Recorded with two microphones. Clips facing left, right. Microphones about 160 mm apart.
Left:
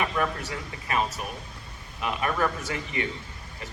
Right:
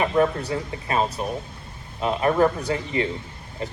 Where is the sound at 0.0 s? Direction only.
30° right (ahead or behind).